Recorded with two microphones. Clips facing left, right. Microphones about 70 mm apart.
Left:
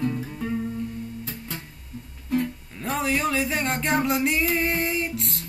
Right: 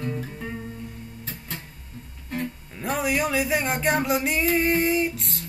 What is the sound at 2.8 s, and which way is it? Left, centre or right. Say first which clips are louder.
Music: even; centre.